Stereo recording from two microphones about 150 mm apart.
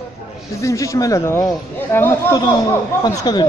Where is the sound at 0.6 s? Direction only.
20° left (ahead or behind).